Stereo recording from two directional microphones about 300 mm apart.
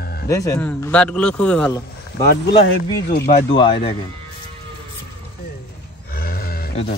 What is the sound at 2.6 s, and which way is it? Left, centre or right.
A man's voice, left.